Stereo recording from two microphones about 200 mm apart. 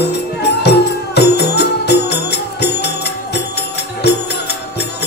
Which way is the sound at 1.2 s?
55° left (ahead or behind).